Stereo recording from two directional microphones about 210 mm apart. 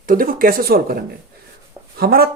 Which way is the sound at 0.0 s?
40° right (ahead or behind).